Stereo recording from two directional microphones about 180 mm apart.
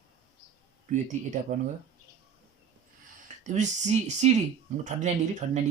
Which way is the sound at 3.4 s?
40° right (ahead or behind).